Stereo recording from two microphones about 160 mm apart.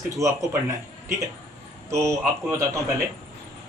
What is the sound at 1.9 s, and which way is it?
Speech, 15° right (ahead or behind).